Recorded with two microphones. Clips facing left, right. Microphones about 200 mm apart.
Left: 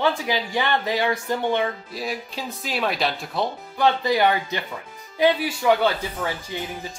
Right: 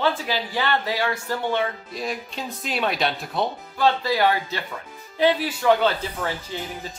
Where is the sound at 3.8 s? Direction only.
20° left (ahead or behind).